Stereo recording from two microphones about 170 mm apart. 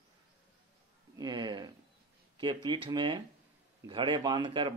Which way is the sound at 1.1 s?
25° right (ahead or behind).